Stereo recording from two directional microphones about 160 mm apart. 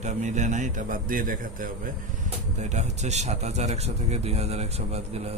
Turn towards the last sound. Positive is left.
turn(degrees=-40)  # may be behind; listen again after turning